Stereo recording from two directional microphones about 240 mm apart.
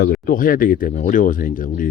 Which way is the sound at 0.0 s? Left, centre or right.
Left.